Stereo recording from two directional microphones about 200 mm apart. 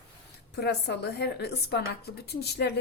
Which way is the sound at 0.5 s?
55° left (ahead or behind).